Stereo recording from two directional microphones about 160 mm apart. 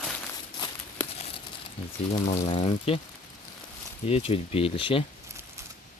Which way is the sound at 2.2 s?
40° left (ahead or behind).